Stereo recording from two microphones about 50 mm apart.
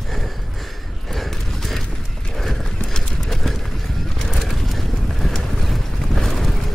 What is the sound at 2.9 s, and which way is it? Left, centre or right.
Clip-clop, centre.